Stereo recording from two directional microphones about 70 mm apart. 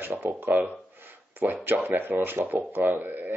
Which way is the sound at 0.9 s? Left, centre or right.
Right.